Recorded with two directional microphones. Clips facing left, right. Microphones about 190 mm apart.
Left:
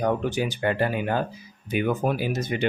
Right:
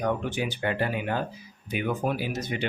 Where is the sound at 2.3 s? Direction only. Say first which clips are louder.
Left 4 dB; 50° left (ahead or behind).